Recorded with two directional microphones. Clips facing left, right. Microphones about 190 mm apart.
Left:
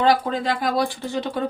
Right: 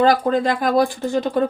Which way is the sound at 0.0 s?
45° right (ahead or behind).